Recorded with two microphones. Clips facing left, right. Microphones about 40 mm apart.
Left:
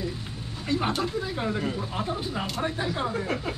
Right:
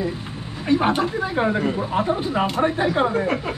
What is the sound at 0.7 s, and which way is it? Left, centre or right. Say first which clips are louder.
Speech: right 8 dB; right.